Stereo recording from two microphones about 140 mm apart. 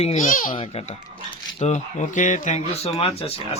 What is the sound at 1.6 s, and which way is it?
A man's voice, 55° left (ahead or behind).